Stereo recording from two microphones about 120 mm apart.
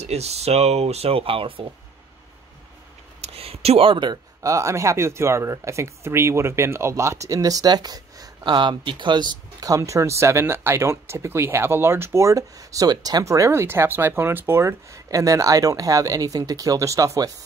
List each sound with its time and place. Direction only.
0.0 s speech: 60° right (ahead or behind)
3.2 s a sound: 55° right (ahead or behind)
4.4 s speech: 25° right (ahead or behind)